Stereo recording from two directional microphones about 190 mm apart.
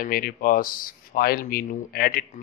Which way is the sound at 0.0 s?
50° left (ahead or behind).